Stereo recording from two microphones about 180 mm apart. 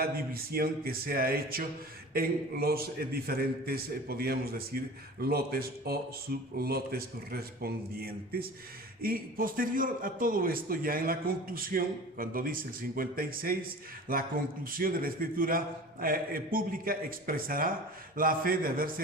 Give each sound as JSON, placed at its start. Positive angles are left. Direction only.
{"t": 0.5, "sound": "a man's voice", "side_deg": -55}